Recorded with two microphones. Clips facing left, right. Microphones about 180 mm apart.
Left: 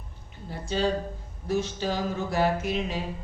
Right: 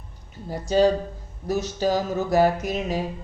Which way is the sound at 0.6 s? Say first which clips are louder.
Right 7 dB; 40° right (ahead or behind).